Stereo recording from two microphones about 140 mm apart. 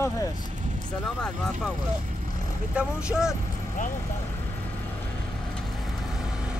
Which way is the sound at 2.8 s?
5° right (ahead or behind).